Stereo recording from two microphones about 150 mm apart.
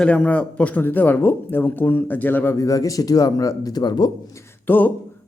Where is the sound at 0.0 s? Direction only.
10° left (ahead or behind); by 4.1 s 30° left (ahead or behind).